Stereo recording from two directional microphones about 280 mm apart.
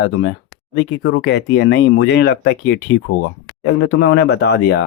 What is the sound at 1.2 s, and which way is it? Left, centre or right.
Speech, left.